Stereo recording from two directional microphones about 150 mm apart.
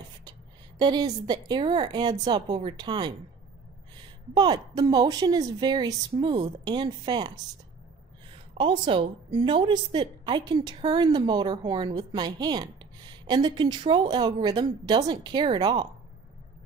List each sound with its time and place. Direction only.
0.7 s a woman's voice: 30° right (ahead or behind)
4.3 s a woman's voice: 30° right (ahead or behind)
8.5 s a woman's voice: 35° right (ahead or behind)